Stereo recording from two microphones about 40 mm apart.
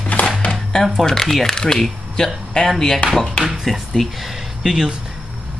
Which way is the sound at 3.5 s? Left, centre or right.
Centre.